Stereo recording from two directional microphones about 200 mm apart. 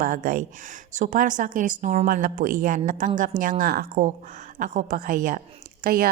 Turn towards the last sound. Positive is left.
turn(degrees=-45)  # may be behind; listen again after turning